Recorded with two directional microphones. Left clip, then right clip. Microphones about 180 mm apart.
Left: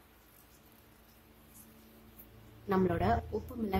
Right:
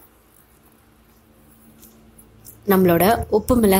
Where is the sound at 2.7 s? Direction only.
45° right (ahead or behind).